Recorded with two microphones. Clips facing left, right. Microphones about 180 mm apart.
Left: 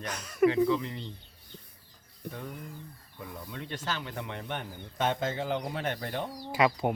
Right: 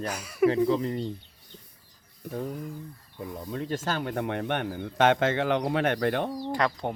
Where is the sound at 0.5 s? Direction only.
40° right (ahead or behind).